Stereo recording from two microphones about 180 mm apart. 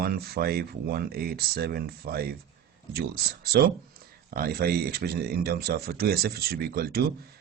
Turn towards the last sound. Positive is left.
turn(degrees=-60)  # may be behind; listen again after turning